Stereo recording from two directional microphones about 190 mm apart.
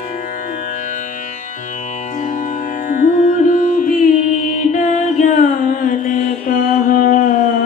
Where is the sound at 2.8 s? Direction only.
45° left (ahead or behind).